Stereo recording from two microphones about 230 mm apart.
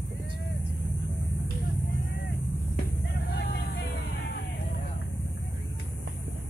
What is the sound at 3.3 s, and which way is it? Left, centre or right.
Vehicle, left.